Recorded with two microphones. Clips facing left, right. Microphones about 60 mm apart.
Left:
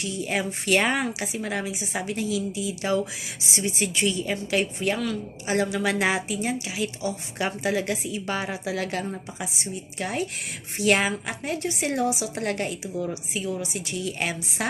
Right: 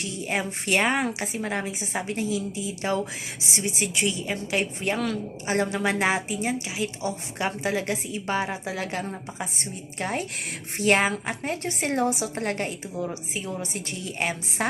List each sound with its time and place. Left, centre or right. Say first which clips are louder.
0.0 s a woman's voice: left 1 dB; right
4.8 s a woman's voice: even; right
9.6 s a woman's voice: left 1 dB; right
12.3 s a woman's voice: left 1 dB; right